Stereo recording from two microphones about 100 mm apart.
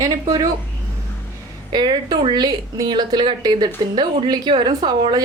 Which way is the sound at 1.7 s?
45° right (ahead or behind).